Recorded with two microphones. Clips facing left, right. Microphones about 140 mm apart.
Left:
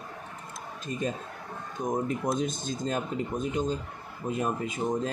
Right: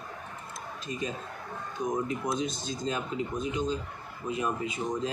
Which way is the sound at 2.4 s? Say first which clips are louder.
Left 1 dB; 50° left (ahead or behind).